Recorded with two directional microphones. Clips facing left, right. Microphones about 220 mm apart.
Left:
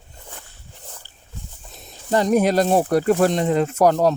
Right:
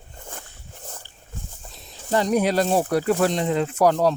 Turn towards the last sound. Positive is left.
turn(degrees=45)  # may be behind; listen again after turning